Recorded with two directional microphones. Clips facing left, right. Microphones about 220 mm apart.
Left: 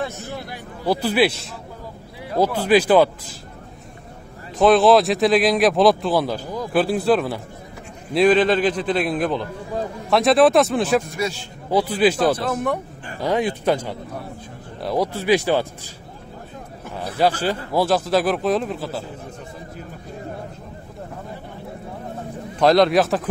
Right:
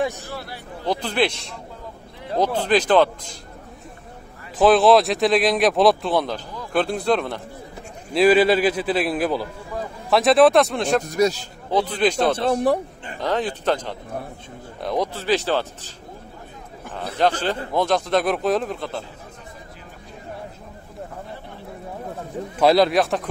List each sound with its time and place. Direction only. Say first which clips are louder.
0.0 s speech: right 3 dB; 15° right (ahead or behind)
0.3 s speech: left 1 dB; 15° left (ahead or behind)
4.6 s a man's voice: left 1 dB; centre (ahead or behind)
11.1 s speech: right 6 dB; 40° right (ahead or behind)
11.7 s speech: left 2 dB; 10° left (ahead or behind)
12.4 s speech: right 3 dB; 30° right (ahead or behind)
13.2 s speech: left 3 dB; 10° left (ahead or behind)
16.9 s a man's voice: left 1 dB; 10° left (ahead or behind)
22.6 s a man's voice: left 1 dB; 5° right (ahead or behind)